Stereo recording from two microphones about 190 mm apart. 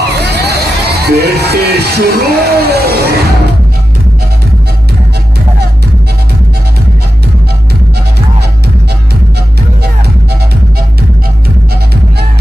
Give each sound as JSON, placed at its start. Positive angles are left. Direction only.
{"t": 0.2, "sound": "speech", "side_deg": -60}